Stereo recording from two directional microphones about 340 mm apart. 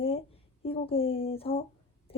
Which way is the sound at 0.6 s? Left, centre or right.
Centre.